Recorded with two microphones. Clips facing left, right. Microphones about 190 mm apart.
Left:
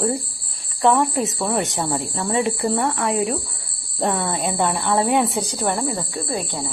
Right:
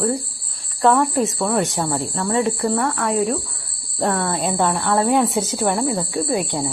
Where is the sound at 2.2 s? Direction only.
15° left (ahead or behind); by 5.9 s 5° right (ahead or behind).